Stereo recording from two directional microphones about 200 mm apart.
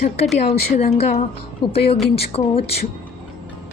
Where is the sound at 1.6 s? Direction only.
25° left (ahead or behind).